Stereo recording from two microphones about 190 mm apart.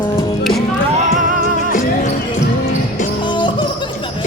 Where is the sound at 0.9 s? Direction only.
40° right (ahead or behind).